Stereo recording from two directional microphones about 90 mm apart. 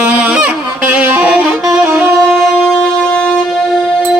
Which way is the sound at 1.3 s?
5° right (ahead or behind).